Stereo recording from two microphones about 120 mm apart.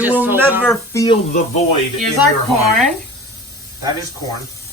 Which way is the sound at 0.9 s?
25° left (ahead or behind).